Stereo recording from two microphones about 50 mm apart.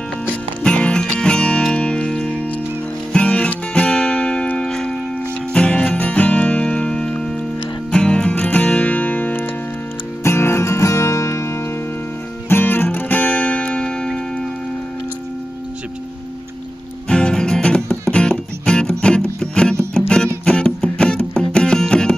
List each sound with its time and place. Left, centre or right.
0.7 s music: left
5.9 s music: left
10.2 s music: left
12.4 s music: left
12.9 s music: left; by 14.2 s centre
17.1 s music: centre